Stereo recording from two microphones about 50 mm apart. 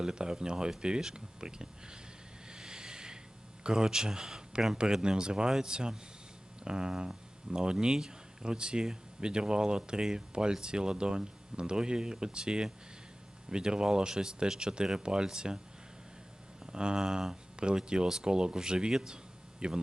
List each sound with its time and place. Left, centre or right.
0.0 s speech: centre
2.5 s vehicle: centre
3.6 s speech: centre
16.7 s speech: centre